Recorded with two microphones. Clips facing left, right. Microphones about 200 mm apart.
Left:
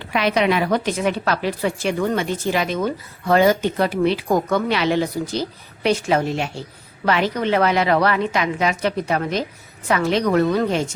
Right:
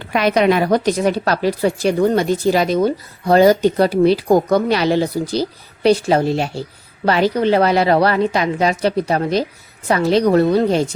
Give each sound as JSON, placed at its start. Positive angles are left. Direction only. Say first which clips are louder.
{"t": 0.1, "sound": "a woman's voice", "louder": "right 4 dB", "side_deg": -45}